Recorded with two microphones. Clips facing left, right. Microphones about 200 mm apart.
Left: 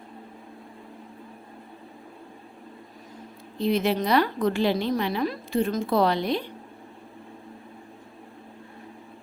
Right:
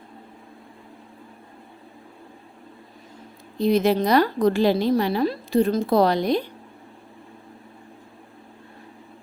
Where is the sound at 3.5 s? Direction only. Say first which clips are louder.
Right 4 dB; 40° right (ahead or behind).